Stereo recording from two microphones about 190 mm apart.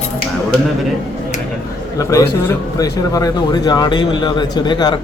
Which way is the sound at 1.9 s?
15° left (ahead or behind).